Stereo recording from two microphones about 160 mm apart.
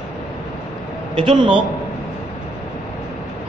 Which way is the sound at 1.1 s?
30° right (ahead or behind).